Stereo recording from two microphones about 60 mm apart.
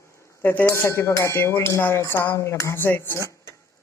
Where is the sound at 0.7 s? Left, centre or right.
Left.